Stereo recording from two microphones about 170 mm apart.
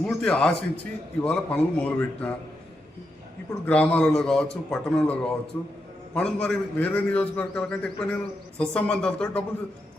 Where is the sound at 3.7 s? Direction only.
10° left (ahead or behind).